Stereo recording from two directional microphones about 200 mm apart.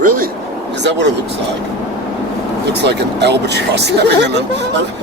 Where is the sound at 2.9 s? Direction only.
55° right (ahead or behind).